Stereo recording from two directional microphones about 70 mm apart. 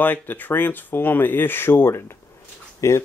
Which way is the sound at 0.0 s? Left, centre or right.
Left.